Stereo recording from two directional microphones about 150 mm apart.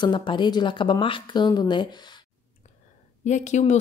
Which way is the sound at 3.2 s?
50° left (ahead or behind).